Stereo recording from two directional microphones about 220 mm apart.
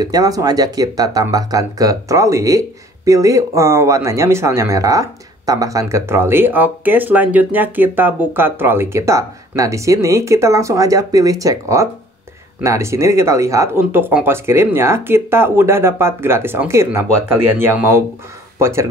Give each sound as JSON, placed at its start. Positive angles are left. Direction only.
{"t": 0.0, "sound": "speech", "side_deg": -15}